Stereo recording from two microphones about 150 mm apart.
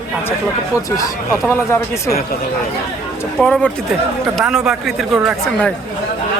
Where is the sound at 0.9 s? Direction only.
20° left (ahead or behind).